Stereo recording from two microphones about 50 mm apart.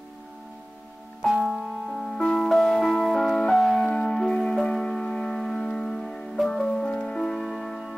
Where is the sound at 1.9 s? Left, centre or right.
Centre.